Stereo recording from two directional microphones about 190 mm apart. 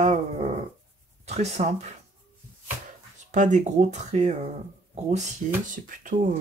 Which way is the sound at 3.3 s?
40° right (ahead or behind).